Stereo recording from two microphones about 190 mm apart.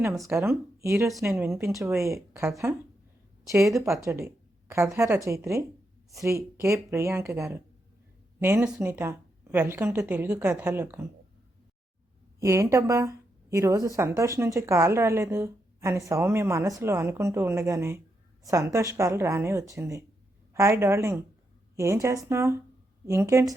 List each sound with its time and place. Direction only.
0.3 s speech: 15° right (ahead or behind)
3.8 s speech: 15° right (ahead or behind)
12.4 s speech: 15° right (ahead or behind)